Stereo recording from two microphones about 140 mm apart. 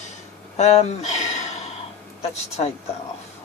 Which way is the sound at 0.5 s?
55° left (ahead or behind).